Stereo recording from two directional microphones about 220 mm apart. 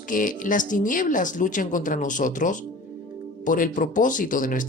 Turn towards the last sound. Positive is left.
turn(degrees=35)  # may be behind; listen again after turning